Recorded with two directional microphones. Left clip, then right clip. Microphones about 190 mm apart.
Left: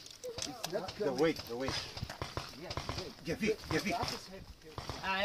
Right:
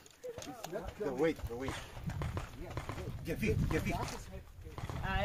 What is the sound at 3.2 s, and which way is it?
Speech, 35° left (ahead or behind).